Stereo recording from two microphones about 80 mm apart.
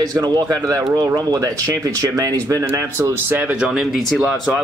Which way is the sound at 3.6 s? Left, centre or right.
Centre.